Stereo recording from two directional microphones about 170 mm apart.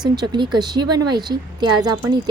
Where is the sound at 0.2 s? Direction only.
25° right (ahead or behind).